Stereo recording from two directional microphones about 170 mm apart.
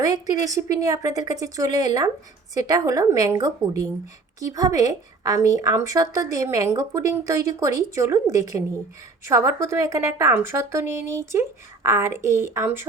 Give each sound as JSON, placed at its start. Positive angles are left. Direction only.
{"t": 0.0, "sound": "a woman's voice", "side_deg": -20}